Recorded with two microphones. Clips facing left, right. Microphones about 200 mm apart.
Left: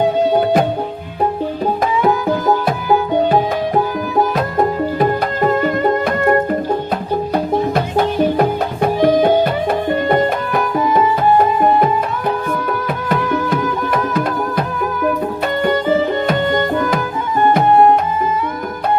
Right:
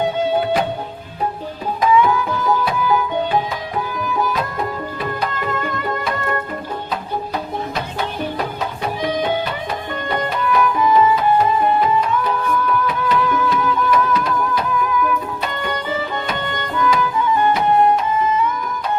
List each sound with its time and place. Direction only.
1.8 s music: 40° left (ahead or behind)
15.6 s music: 45° left (ahead or behind)